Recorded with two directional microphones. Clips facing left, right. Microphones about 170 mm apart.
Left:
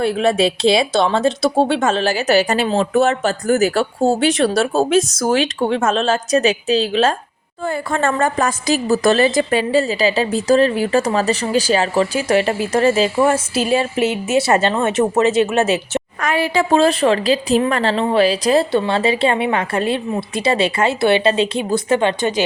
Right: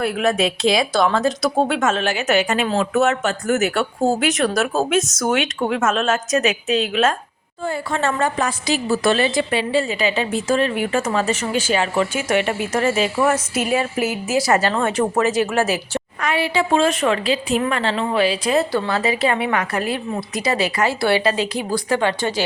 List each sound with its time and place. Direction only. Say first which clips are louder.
0.0 s a woman's voice: left 3 dB; 30° left (ahead or behind)
7.6 s a woman's voice: left 3 dB; 55° left (ahead or behind); by 16.0 s 25° left (ahead or behind)
16.2 s a woman's voice: left 2 dB; 45° left (ahead or behind)
18.7 s a woman's voice: left 4 dB; 25° left (ahead or behind)